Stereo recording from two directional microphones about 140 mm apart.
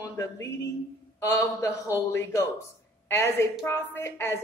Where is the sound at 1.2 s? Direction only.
25° left (ahead or behind).